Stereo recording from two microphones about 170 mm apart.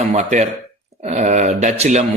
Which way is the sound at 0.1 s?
40° right (ahead or behind).